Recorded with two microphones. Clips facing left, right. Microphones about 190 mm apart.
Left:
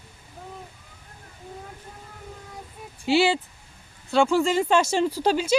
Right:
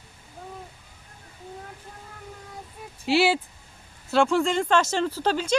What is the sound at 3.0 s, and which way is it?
Speech, 5° right (ahead or behind).